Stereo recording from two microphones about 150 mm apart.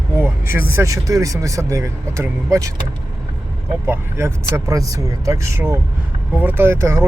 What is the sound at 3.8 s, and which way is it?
Speech, 15° right (ahead or behind).